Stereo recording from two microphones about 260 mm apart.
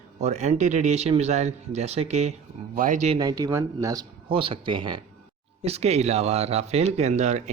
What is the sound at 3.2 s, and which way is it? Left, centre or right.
Speech, centre.